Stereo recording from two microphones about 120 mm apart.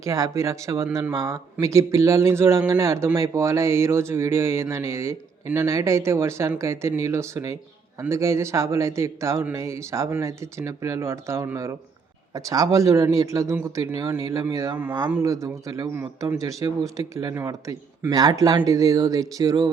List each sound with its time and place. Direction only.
0.0 s speech: 25° right (ahead or behind)
14.8 s speech: 15° right (ahead or behind)
15.2 s speech: 25° right (ahead or behind)